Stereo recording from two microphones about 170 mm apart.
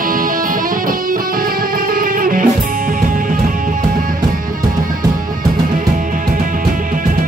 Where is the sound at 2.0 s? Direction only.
55° right (ahead or behind).